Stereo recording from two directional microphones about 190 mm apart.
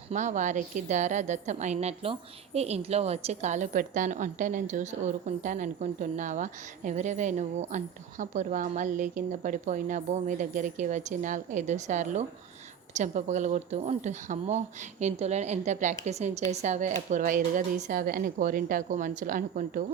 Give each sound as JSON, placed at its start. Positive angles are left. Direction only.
{"t": 0.1, "sound": "a woman's voice", "side_deg": -40}